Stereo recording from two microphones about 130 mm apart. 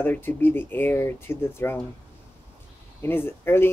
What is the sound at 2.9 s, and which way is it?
Speech, 15° left (ahead or behind).